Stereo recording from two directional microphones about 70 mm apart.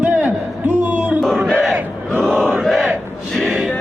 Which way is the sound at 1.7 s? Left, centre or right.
Right.